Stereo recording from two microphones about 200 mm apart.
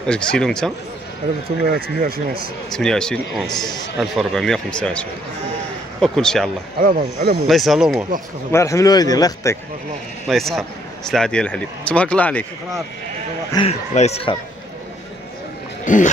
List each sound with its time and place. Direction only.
0.0 s speech: 5° left (ahead or behind)
1.7 s speech: 50° right (ahead or behind)
2.7 s speech: 5° left (ahead or behind)
6.8 s speech: 45° right (ahead or behind)
7.4 s speech: centre (ahead or behind)
8.5 s a man's voice: 15° left (ahead or behind)
10.2 s speech: centre (ahead or behind)
13.5 s speech: 30° left (ahead or behind)
15.8 s a sound: 40° left (ahead or behind)